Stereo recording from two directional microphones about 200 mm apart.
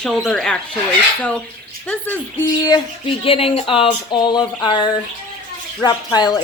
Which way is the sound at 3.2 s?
30° left (ahead or behind).